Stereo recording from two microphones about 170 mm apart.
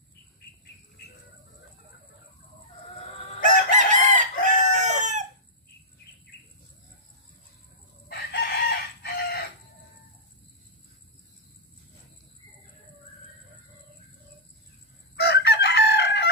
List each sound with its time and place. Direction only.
3.4 s chicken: 45° right (ahead or behind)
8.1 s chicken: 70° left (ahead or behind)
15.1 s chicken: 75° left (ahead or behind)